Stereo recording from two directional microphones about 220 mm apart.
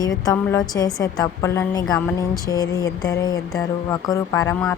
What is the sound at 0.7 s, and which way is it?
Speech, 10° left (ahead or behind).